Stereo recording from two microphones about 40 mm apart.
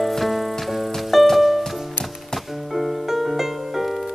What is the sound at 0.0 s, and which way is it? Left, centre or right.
Music, centre.